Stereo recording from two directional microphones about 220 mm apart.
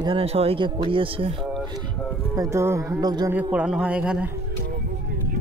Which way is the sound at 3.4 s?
5° right (ahead or behind).